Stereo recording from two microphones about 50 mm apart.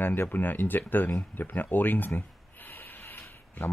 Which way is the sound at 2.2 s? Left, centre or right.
Left.